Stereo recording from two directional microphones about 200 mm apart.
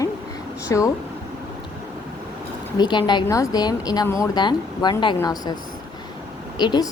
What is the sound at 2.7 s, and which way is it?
A woman's voice, 20° left (ahead or behind).